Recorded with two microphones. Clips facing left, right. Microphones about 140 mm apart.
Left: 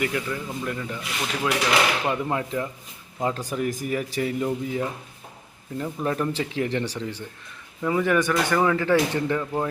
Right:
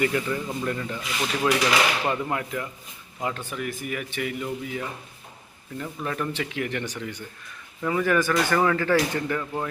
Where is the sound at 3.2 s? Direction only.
35° left (ahead or behind).